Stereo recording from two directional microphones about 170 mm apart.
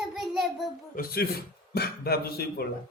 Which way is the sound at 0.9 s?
65° left (ahead or behind).